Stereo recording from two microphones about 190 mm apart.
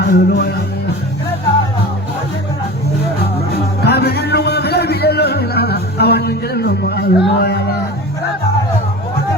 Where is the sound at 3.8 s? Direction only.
60° left (ahead or behind).